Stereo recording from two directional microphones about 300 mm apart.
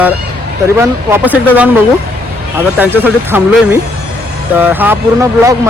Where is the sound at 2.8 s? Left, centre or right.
Centre.